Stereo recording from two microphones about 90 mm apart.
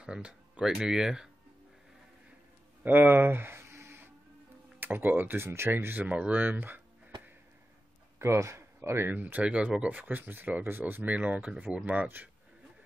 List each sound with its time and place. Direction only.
0.0 s speech: 10° right (ahead or behind)
2.8 s a sound: 20° right (ahead or behind)
4.7 s speech: 20° right (ahead or behind)
8.2 s speech: 30° right (ahead or behind)